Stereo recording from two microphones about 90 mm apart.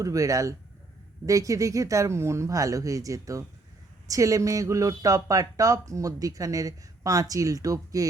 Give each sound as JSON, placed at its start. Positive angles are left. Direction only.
{"t": 0.0, "sound": "speech", "side_deg": -40}